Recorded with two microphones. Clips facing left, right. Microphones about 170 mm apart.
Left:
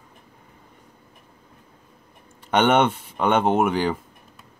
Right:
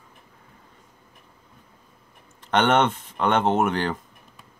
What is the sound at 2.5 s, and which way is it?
Speech, 10° left (ahead or behind).